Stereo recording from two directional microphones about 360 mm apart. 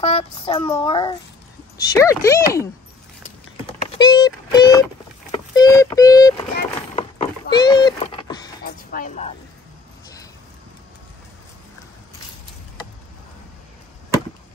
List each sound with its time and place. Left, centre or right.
0.0 s speech: centre
4.0 s synthetic singing: centre
5.3 s speech: centre
6.5 s a sound: centre
8.6 s music: left